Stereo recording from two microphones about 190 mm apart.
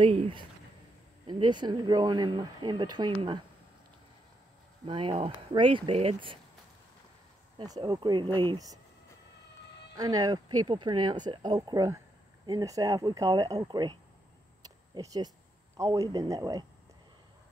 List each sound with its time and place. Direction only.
0.0 s speech: 30° right (ahead or behind)
4.8 s speech: 25° right (ahead or behind)
7.5 s speech: 20° right (ahead or behind)
9.9 s speech: 20° right (ahead or behind)
14.6 s a sound: 20° right (ahead or behind)
15.8 s speech: 20° right (ahead or behind)